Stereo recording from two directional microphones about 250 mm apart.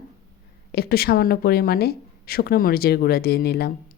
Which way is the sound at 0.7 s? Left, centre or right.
Left.